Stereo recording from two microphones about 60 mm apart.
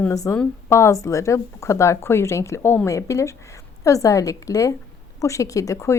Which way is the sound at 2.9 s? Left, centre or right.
Left.